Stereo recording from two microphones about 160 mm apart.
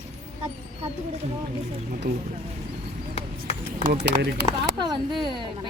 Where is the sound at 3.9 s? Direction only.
90° right.